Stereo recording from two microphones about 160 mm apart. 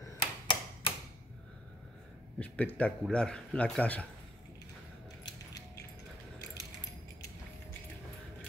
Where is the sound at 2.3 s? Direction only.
10° left (ahead or behind).